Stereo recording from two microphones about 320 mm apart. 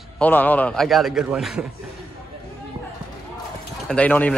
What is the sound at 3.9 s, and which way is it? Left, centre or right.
Speech, centre.